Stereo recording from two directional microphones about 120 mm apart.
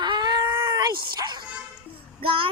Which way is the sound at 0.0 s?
35° right (ahead or behind).